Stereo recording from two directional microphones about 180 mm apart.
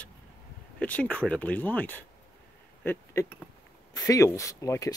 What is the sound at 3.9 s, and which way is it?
Speech, 15° left (ahead or behind).